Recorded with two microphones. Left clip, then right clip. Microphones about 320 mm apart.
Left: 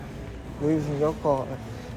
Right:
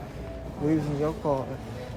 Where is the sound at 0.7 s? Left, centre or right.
Centre.